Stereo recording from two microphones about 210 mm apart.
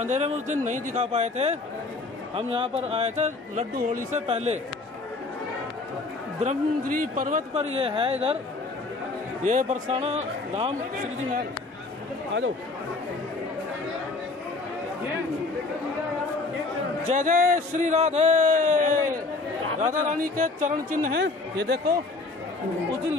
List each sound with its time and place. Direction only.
0.0 s speech: 35° right (ahead or behind)
6.4 s speech: 40° right (ahead or behind)
7.7 s speech: 25° right (ahead or behind)
9.4 s speech: 40° right (ahead or behind)
17.1 s speech: 40° right (ahead or behind)
21.2 s speech: 50° right (ahead or behind)